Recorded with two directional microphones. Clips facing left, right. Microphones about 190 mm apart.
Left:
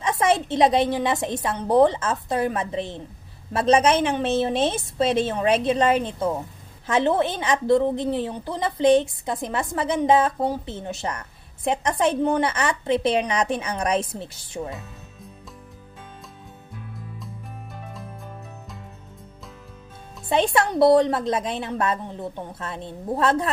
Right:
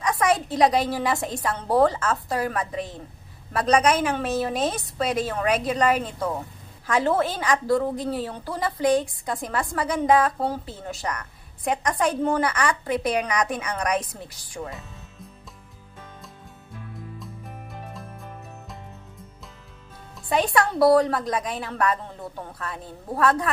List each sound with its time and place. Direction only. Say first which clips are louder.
0.0 s a woman's voice: left 1 dB; 25° left (ahead or behind)
20.2 s a woman's voice: left 1 dB; 25° left (ahead or behind)